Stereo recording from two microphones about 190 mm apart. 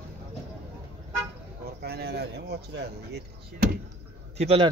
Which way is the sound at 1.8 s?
60° right (ahead or behind).